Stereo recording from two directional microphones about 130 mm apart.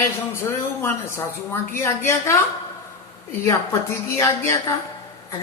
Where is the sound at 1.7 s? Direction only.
20° left (ahead or behind).